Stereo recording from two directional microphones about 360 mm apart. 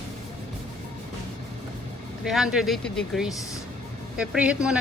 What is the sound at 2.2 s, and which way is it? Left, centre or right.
Speech, centre.